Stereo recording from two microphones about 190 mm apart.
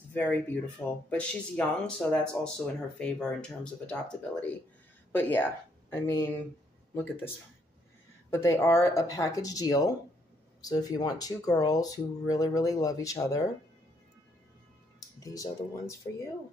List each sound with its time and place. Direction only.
0.1 s speech: 10° left (ahead or behind)
15.0 s speech: 20° left (ahead or behind)